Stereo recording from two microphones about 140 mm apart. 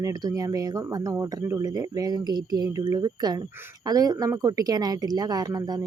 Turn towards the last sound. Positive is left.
turn(degrees=-30)  # may be behind; listen again after turning